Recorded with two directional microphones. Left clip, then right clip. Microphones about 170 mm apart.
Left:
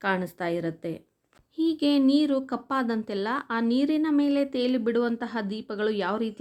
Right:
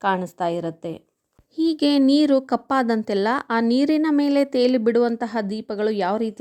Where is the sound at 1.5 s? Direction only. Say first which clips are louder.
Right 5 dB; 40° right (ahead or behind).